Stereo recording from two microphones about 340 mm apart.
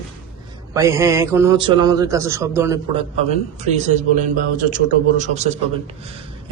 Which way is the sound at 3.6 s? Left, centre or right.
Centre.